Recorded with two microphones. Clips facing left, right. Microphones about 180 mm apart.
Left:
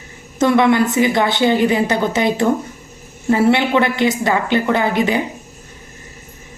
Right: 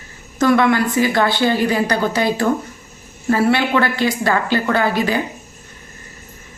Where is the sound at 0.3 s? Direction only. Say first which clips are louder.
Left 1 dB; 20° left (ahead or behind).